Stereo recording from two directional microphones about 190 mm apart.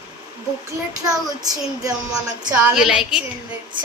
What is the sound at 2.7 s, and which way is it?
Speech, 5° right (ahead or behind).